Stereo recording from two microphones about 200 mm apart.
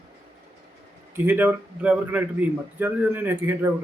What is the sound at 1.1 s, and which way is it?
A man's voice, 10° right (ahead or behind).